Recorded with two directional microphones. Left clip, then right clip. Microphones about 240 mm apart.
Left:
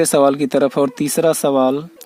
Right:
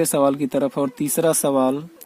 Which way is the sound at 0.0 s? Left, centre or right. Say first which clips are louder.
Left 5 dB; centre.